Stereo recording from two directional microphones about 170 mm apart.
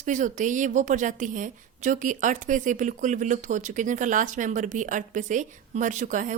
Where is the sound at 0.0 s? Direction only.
45° right (ahead or behind).